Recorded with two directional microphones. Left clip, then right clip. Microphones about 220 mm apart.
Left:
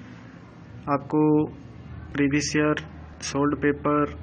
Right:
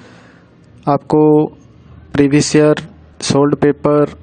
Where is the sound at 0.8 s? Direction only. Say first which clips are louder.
Right 11 dB; 55° right (ahead or behind).